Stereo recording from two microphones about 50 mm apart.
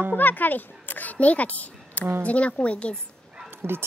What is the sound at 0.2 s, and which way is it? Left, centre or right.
A child's voice, left.